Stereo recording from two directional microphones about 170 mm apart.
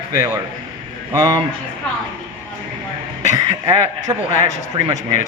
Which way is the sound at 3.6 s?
20° right (ahead or behind).